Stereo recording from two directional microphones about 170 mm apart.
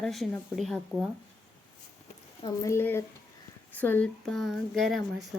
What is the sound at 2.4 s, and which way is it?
Speech, 20° left (ahead or behind).